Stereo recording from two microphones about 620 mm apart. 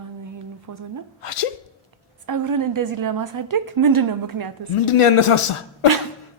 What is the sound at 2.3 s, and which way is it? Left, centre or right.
A woman's voice, right.